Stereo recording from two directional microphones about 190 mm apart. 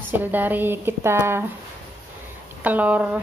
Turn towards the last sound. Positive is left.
turn(degrees=-5)  # may be behind; listen again after turning